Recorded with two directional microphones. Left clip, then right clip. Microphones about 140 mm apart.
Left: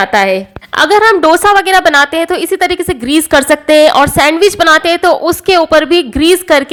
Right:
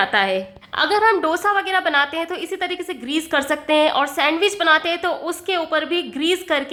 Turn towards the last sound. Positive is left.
turn(degrees=45)  # may be behind; listen again after turning